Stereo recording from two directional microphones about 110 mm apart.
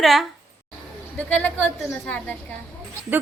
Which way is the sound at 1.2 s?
15° left (ahead or behind).